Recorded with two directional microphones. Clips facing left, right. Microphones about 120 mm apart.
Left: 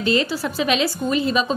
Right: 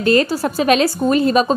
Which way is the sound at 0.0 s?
50° right (ahead or behind).